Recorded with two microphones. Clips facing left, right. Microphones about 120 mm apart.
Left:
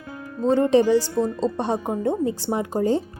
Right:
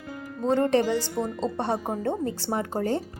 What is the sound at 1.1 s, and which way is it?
Speech, 15° right (ahead or behind).